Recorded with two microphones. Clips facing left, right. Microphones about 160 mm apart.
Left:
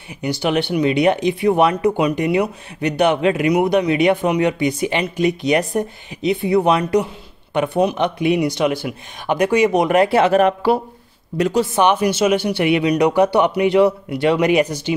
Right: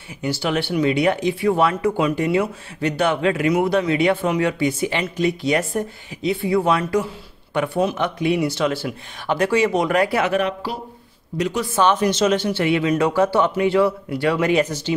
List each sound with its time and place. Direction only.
0.2 s speech: 20° left (ahead or behind)
10.4 s speech: 60° left (ahead or behind)
11.6 s speech: 15° left (ahead or behind)